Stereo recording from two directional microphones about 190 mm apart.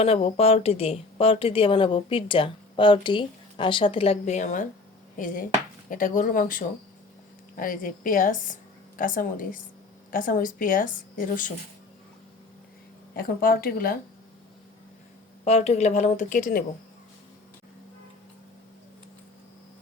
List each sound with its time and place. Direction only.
0.0 s a woman's voice: 30° left (ahead or behind)
13.1 s a woman's voice: 50° left (ahead or behind)
15.4 s speech: 35° left (ahead or behind)